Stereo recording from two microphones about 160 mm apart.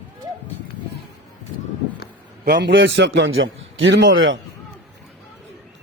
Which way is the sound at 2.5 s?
90° right.